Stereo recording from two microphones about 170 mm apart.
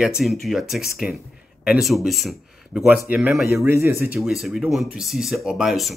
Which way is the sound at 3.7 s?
15° right (ahead or behind).